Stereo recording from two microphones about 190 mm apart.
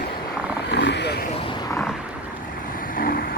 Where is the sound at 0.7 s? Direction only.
65° left (ahead or behind).